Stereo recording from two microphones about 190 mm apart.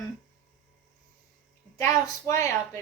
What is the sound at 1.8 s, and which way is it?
A woman's voice, 15° left (ahead or behind).